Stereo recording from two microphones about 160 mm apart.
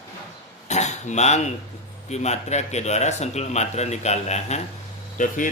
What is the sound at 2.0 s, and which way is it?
Speech, 45° left (ahead or behind).